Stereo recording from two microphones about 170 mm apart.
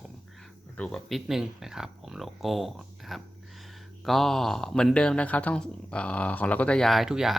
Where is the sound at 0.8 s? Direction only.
Centre (ahead or behind).